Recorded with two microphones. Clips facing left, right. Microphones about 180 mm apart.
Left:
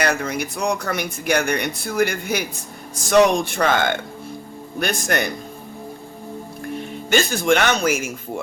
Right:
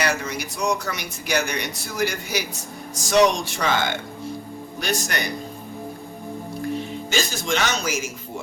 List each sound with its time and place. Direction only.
0.0 s speech: 55° left (ahead or behind)
6.7 s speech: 60° left (ahead or behind)